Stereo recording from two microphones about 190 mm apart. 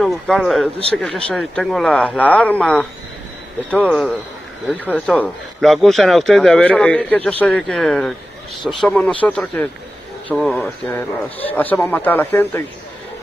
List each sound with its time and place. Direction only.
0.0 s speech: centre (ahead or behind)